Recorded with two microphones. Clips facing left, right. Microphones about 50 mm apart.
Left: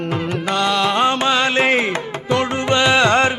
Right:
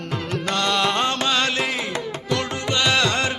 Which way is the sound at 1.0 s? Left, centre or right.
Centre.